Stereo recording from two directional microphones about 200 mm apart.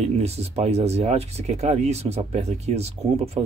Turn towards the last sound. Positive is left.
turn(degrees=-30)  # may be behind; listen again after turning